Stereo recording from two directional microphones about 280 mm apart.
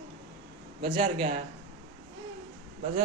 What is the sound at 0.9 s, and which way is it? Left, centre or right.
Speech, right.